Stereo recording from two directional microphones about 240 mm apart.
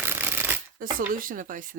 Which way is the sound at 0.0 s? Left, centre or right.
Centre.